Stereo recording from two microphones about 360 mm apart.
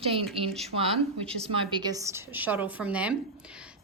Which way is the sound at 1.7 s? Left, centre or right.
Centre.